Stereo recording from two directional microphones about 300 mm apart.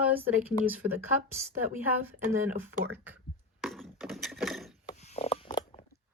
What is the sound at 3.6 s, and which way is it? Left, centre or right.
Wood, centre.